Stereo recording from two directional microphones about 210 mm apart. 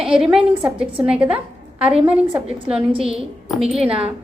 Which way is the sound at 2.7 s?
25° right (ahead or behind).